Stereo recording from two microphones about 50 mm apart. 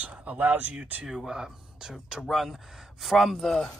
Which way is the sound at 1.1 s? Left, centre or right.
Centre.